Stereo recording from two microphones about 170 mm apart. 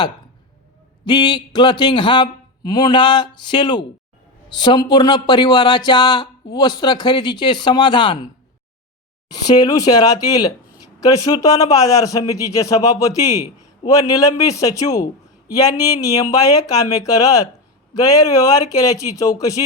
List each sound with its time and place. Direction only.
1.0 s speech: 25° left (ahead or behind)
9.3 s speech: 20° left (ahead or behind)